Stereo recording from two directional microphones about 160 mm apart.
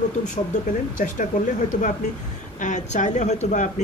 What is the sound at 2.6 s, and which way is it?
Speech, 50° left (ahead or behind).